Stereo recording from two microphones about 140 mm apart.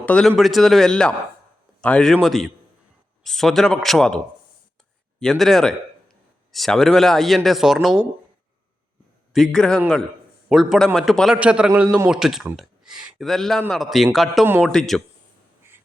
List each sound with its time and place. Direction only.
0.0 s speech: 5° left (ahead or behind)
5.2 s speech: 5° left (ahead or behind)
9.3 s a man's voice: 5° left (ahead or behind)
14.4 s a man's voice: 15° right (ahead or behind)
14.7 s speech: 5° left (ahead or behind)